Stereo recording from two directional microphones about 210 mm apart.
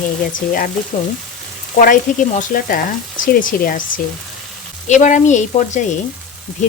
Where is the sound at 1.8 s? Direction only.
40° left (ahead or behind).